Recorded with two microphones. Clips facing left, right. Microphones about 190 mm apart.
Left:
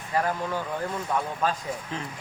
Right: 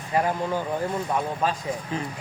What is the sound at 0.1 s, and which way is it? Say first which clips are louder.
Speech: right 3 dB; 15° right (ahead or behind).